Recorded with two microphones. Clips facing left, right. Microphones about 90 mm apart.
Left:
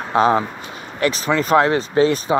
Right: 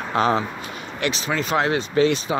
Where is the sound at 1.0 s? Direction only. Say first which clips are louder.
Left 6 dB; 45° left (ahead or behind).